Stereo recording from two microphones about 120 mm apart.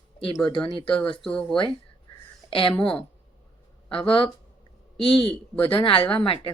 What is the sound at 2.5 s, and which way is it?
Speech, 50° left (ahead or behind).